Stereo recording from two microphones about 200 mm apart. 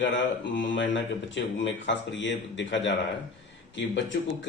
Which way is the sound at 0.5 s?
65° left (ahead or behind).